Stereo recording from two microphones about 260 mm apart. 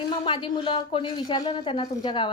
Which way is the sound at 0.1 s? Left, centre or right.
Centre.